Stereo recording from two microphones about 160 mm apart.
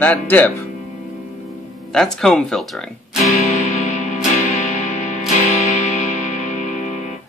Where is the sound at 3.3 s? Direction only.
50° left (ahead or behind).